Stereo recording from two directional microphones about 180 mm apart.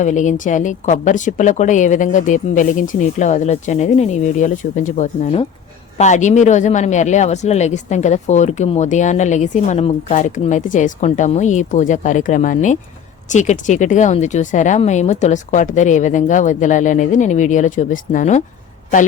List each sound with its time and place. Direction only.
0.0 s a woman's voice: 40° left (ahead or behind)